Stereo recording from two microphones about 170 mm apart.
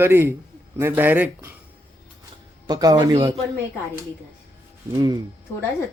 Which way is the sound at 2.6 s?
25° right (ahead or behind).